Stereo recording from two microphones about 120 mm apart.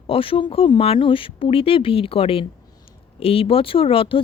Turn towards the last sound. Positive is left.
turn(degrees=50)  # may be behind; listen again after turning